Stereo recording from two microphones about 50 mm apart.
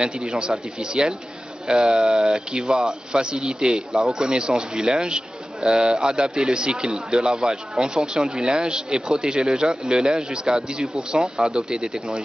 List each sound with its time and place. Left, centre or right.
0.0 s speech: centre